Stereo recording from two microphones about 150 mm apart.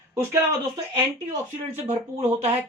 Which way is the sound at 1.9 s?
45° right (ahead or behind).